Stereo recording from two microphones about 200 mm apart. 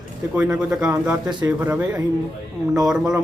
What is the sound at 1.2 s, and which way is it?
Speech, 20° right (ahead or behind).